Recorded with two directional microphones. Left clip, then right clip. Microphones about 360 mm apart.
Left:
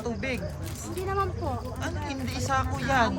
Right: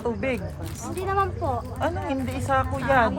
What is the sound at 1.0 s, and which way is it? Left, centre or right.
Speech, centre.